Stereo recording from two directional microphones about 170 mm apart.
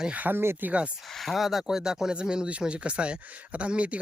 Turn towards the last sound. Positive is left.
turn(degrees=-5)  # may be behind; listen again after turning